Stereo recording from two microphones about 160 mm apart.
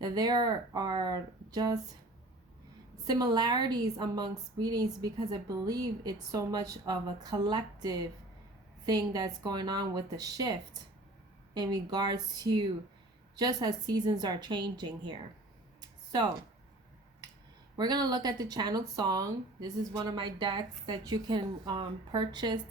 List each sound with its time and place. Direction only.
0.0 s speech: 25° right (ahead or behind)
3.0 s speech: 25° right (ahead or behind)
15.8 s a sound: 25° right (ahead or behind)
17.7 s speech: 25° right (ahead or behind)